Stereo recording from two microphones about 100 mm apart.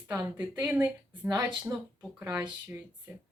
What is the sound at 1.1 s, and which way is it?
Speech, 40° right (ahead or behind).